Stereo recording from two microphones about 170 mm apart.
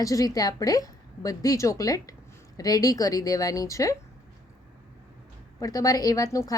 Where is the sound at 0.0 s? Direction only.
20° left (ahead or behind).